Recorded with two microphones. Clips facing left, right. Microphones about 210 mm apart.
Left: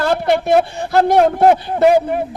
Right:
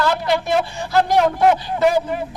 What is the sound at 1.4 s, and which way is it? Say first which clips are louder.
Speech: left 4 dB; 35° left (ahead or behind).